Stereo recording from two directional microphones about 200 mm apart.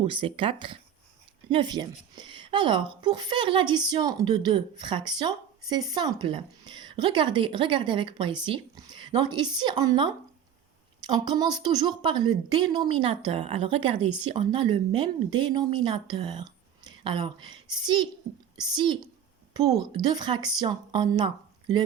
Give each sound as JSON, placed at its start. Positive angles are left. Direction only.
{"t": 0.0, "sound": "speech", "side_deg": -25}